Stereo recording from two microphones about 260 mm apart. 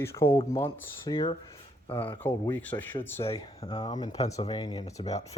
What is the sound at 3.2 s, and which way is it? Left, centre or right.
Speech, left.